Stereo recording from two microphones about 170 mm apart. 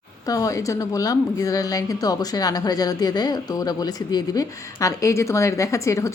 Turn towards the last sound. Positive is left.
turn(degrees=15)  # may be behind; listen again after turning